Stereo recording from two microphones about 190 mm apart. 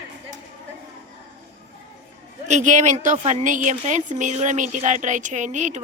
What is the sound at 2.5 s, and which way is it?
Speech, 40° right (ahead or behind).